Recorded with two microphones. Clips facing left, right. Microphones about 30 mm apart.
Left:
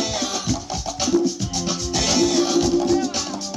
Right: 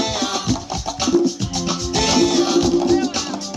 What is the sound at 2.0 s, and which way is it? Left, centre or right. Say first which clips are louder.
Music: right 3 dB; right.